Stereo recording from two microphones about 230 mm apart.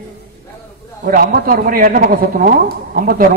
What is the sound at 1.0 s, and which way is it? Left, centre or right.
A woman's voice, right.